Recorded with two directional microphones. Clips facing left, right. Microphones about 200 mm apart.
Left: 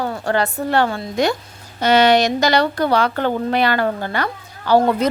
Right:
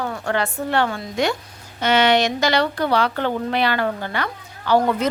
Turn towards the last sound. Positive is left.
turn(degrees=35)  # may be behind; listen again after turning